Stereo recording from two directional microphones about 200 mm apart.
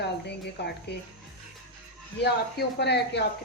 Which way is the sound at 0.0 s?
55° left (ahead or behind).